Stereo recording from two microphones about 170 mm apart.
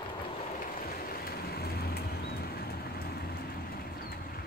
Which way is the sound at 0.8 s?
60° left (ahead or behind).